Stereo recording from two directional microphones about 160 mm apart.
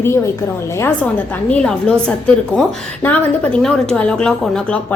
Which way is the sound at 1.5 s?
5° left (ahead or behind).